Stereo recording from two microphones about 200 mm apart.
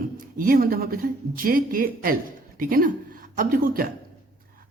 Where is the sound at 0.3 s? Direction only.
45° right (ahead or behind).